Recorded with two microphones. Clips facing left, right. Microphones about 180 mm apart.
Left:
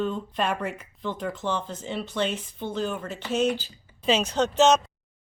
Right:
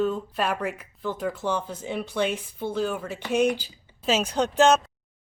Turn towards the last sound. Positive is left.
turn(degrees=-10)  # may be behind; listen again after turning